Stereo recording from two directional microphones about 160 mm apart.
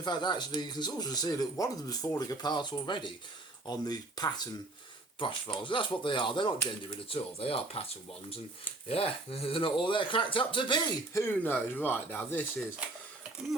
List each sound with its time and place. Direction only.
0.0 s speech: 25° left (ahead or behind)
8.9 s speech: 35° left (ahead or behind)
11.1 s speech: 15° left (ahead or behind)